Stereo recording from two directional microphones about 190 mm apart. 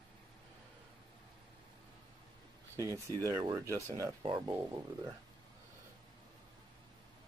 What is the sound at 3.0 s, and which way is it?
Speech, 20° right (ahead or behind).